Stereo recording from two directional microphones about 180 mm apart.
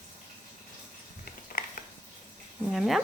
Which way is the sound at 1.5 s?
50° left (ahead or behind).